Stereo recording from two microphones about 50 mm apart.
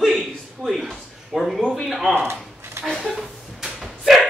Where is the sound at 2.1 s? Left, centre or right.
Right.